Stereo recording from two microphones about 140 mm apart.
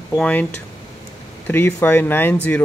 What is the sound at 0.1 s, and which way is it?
Speech, 10° left (ahead or behind).